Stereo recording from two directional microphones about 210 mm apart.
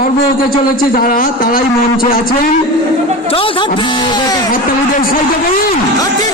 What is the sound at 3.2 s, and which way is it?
Speech, 25° left (ahead or behind).